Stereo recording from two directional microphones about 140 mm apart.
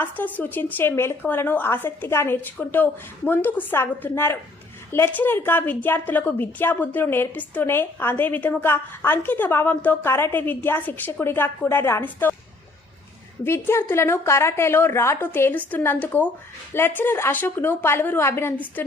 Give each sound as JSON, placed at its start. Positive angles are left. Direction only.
{"t": 0.0, "sound": "a woman's voice", "side_deg": 10}
{"t": 13.4, "sound": "a woman's voice", "side_deg": 15}